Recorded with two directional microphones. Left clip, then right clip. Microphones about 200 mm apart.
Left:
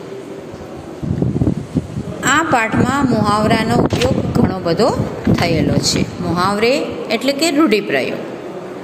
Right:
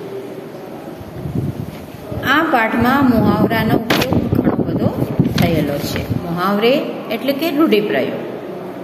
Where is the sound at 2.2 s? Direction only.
35° left (ahead or behind).